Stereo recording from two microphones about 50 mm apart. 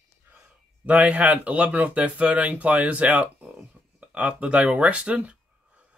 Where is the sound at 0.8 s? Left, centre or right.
Right.